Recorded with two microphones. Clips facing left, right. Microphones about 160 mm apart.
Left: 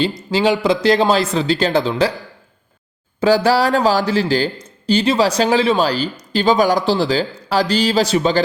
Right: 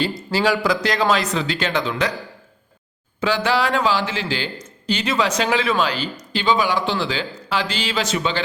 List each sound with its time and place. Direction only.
0.0 s speech: 20° left (ahead or behind)
3.2 s a man's voice: 35° left (ahead or behind)